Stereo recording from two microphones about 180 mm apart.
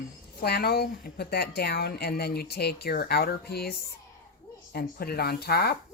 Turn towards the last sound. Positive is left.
turn(degrees=60)  # may be behind; listen again after turning